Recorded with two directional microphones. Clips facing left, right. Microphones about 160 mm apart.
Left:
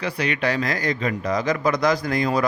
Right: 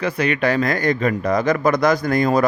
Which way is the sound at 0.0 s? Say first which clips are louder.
Right 4 dB; 50° right (ahead or behind).